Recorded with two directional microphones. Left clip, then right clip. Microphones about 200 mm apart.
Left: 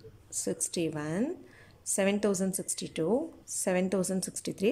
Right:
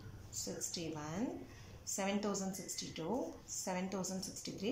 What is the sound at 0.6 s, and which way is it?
A woman's voice, 50° left (ahead or behind).